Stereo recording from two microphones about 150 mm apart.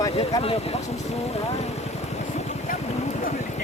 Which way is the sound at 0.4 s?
45° left (ahead or behind).